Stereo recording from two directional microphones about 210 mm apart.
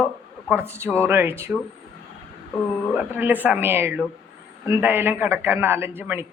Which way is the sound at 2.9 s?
10° right (ahead or behind).